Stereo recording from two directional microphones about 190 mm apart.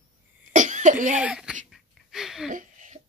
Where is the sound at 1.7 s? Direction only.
Centre (ahead or behind).